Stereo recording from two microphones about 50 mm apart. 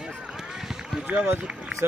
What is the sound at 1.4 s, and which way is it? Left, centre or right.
Run, right.